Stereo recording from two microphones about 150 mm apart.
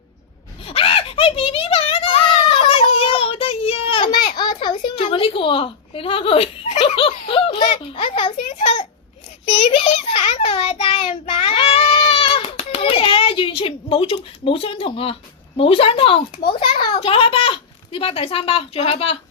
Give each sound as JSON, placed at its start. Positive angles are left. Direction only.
{"t": 0.6, "sound": "a sound", "side_deg": 40}
{"t": 8.4, "sound": "a child's voice", "side_deg": 50}
{"t": 9.6, "sound": "child singing", "side_deg": 50}
{"t": 15.5, "sound": "speech", "side_deg": 40}